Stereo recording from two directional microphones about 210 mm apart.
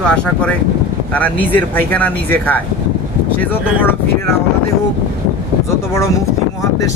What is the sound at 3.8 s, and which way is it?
Speech, 10° left (ahead or behind).